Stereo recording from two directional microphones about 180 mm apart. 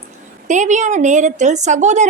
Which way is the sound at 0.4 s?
40° right (ahead or behind).